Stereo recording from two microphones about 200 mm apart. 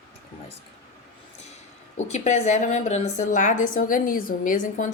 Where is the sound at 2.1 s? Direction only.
35° left (ahead or behind).